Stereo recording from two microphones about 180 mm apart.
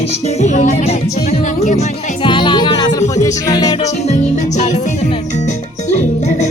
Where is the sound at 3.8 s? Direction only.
40° left (ahead or behind).